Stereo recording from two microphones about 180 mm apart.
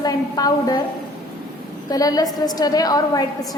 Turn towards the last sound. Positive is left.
turn(degrees=20)  # may be behind; listen again after turning